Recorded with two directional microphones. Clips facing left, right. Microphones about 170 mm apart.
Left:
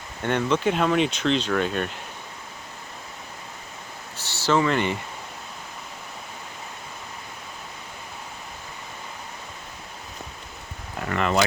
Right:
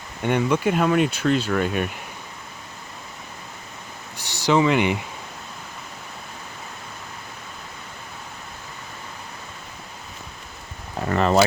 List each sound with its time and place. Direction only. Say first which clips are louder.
0.2 s speech: right 2 dB; 10° right (ahead or behind)
4.2 s a sound: right 3 dB; 15° right (ahead or behind)
11.0 s speech: right 5 dB; 35° right (ahead or behind)